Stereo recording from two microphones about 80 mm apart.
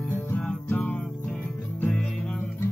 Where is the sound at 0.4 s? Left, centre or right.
Centre.